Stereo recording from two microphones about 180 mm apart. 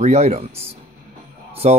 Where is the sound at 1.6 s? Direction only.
40° right (ahead or behind).